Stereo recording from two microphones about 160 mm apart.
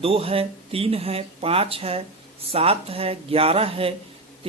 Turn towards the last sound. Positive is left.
turn(degrees=-35)  # may be behind; listen again after turning